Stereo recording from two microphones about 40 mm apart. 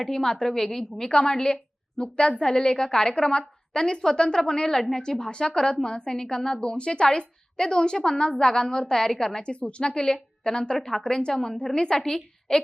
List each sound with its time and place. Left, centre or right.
0.0 s a woman's voice: centre
10.8 s a woman's voice: centre
11.0 s a woman's voice: centre